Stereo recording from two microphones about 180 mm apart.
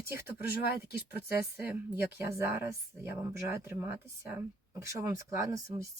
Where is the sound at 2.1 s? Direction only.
10° right (ahead or behind).